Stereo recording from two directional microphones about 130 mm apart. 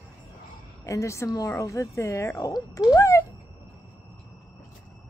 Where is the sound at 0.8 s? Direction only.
25° left (ahead or behind).